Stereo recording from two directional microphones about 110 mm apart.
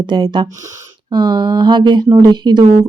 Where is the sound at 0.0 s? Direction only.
45° right (ahead or behind).